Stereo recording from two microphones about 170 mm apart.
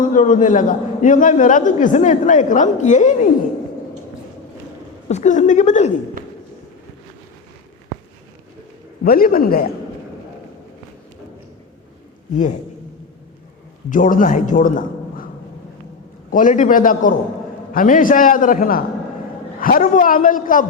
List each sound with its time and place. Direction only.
0.1 s a man's voice: 50° left (ahead or behind)
5.0 s a man's voice: 45° left (ahead or behind)
9.0 s speech: 60° left (ahead or behind)
12.3 s a man's voice: 45° left (ahead or behind)
13.9 s a man's voice: 50° left (ahead or behind)
16.3 s a man's voice: 50° left (ahead or behind)